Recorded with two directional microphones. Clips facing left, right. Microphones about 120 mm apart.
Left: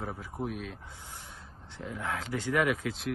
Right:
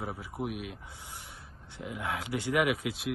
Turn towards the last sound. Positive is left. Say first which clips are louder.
# even
turn(degrees=-15)  # may be behind; listen again after turning